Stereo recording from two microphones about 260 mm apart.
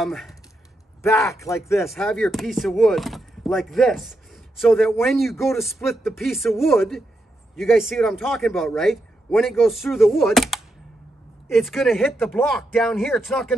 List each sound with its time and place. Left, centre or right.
0.0 s speech: centre
1.0 s speech: centre
1.9 s speech: centre